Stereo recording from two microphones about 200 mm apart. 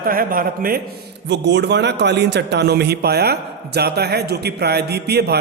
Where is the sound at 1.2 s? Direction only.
60° right (ahead or behind).